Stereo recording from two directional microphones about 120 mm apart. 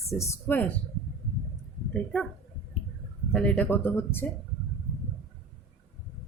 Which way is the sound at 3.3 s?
5° left (ahead or behind).